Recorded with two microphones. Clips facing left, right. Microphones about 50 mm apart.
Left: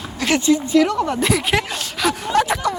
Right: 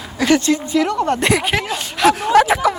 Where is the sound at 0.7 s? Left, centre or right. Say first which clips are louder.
Even; centre.